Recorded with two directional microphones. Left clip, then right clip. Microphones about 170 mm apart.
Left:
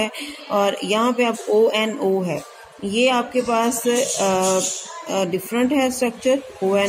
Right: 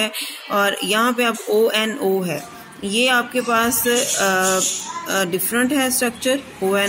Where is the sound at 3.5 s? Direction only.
55° right (ahead or behind).